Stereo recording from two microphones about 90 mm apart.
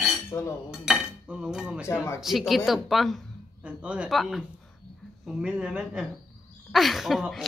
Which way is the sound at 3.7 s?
15° right (ahead or behind).